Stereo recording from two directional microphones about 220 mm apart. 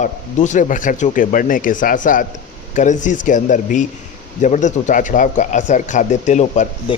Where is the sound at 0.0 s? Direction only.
35° left (ahead or behind).